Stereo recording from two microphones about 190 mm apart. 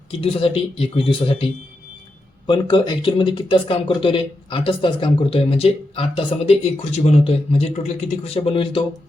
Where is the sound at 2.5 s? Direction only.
25° left (ahead or behind).